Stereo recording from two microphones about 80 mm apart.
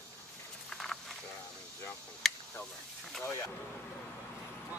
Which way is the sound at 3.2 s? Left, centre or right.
Left.